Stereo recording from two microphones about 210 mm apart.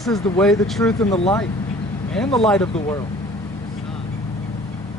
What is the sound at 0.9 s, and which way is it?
Speech, 15° left (ahead or behind).